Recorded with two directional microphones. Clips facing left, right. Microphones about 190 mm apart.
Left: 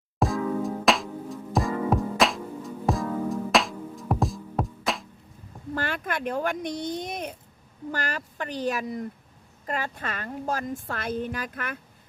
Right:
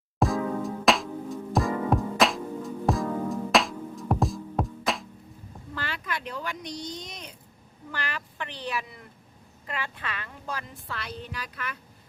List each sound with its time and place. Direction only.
0.2 s music: centre (ahead or behind)
5.7 s a woman's voice: 50° left (ahead or behind)
7.9 s a woman's voice: 40° left (ahead or behind)